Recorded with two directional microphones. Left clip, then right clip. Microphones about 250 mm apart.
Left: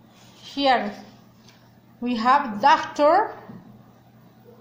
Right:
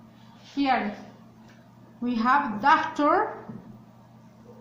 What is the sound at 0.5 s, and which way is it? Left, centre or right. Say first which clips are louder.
Speech: left 5 dB; left.